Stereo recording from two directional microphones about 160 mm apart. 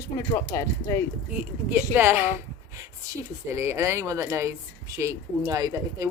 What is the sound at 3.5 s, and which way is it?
Speech, 15° right (ahead or behind).